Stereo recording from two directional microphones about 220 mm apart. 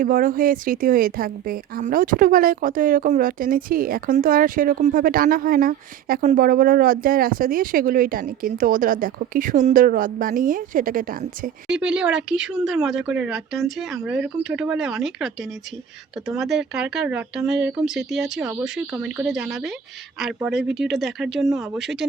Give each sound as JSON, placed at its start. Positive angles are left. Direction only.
{"t": 0.0, "sound": "speech", "side_deg": -40}
{"t": 11.7, "sound": "speech", "side_deg": -5}
{"t": 20.7, "sound": "speech", "side_deg": -50}
{"t": 20.9, "sound": "speech", "side_deg": 0}